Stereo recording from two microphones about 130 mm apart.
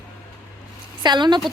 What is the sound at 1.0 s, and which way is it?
Speech, 35° right (ahead or behind).